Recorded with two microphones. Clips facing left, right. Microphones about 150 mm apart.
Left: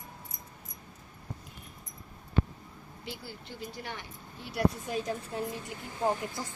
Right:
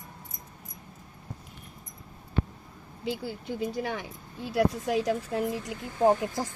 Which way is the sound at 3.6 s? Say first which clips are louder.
Right 9 dB; 90° right.